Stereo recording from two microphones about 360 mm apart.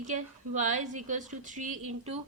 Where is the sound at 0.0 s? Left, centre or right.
Centre.